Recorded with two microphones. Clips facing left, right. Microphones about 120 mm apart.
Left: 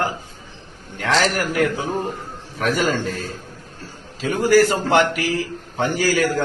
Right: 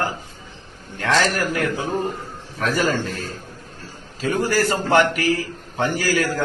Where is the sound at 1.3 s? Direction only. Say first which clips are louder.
Left 2 dB; 15° left (ahead or behind).